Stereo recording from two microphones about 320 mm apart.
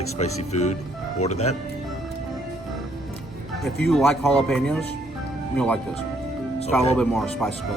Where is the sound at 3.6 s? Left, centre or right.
Centre.